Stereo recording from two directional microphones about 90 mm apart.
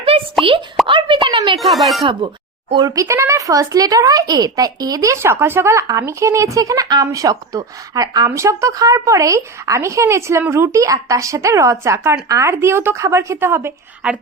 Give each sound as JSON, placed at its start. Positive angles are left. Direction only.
{"t": 0.1, "sound": "plop", "side_deg": -90}
{"t": 0.9, "sound": "speech", "side_deg": -70}
{"t": 1.5, "sound": "speech", "side_deg": 0}
{"t": 2.8, "sound": "a woman's voice", "side_deg": -40}
{"t": 14.0, "sound": "a woman's voice", "side_deg": -10}